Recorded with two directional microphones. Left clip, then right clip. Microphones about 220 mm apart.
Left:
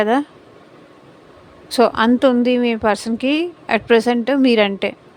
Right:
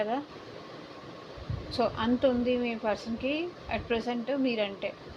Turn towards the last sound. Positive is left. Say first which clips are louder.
# left 15 dB
turn(degrees=60)  # may be behind; listen again after turning